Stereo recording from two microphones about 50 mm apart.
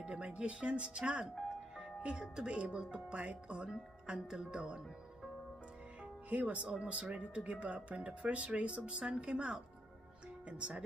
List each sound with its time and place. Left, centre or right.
0.0 s speech: right
6.3 s speech: right